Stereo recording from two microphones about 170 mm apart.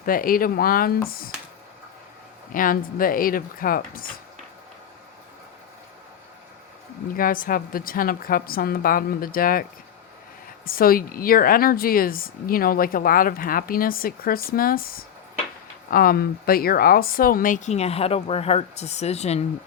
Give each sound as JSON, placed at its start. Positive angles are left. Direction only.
{"t": 0.0, "sound": "a woman's voice", "side_deg": 55}
{"t": 2.5, "sound": "a woman's voice", "side_deg": 55}
{"t": 7.2, "sound": "a woman's voice", "side_deg": 55}
{"t": 10.7, "sound": "a woman's voice", "side_deg": 60}